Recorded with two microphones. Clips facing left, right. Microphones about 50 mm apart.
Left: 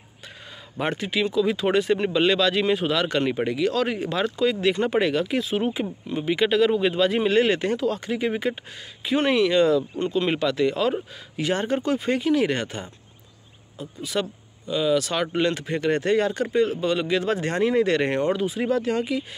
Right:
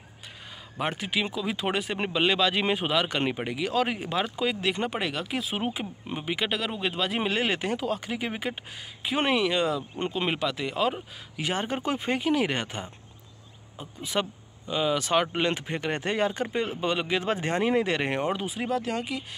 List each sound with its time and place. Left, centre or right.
0.7 s speech: centre